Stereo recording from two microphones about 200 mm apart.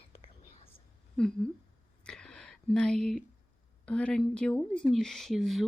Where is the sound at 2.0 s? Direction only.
5° left (ahead or behind).